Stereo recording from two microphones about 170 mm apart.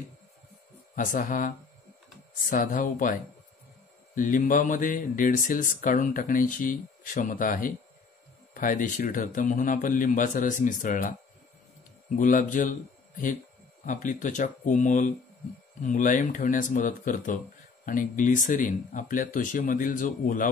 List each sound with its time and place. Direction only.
0.9 s speech: 50° left (ahead or behind)
2.5 s speech: 50° left (ahead or behind)
12.2 s speech: 50° left (ahead or behind)
13.8 s speech: 50° left (ahead or behind)